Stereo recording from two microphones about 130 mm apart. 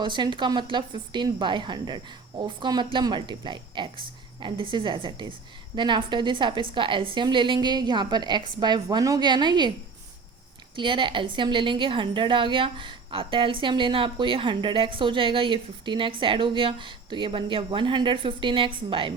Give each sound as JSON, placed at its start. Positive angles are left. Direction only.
{"t": 0.0, "sound": "a woman's voice", "side_deg": -35}
{"t": 10.8, "sound": "a woman's voice", "side_deg": -40}